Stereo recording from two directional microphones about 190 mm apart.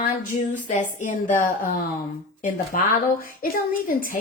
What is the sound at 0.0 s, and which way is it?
Speech, 45° left (ahead or behind).